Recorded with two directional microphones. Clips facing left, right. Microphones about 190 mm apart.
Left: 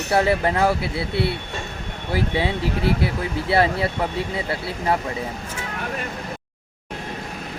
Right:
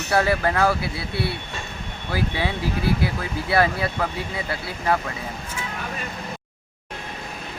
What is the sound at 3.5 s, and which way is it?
Speech, 25° left (ahead or behind).